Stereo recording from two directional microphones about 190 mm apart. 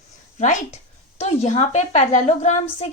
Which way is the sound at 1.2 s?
35° left (ahead or behind).